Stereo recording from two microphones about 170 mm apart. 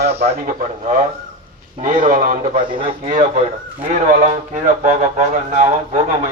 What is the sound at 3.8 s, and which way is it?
Speech, 40° right (ahead or behind).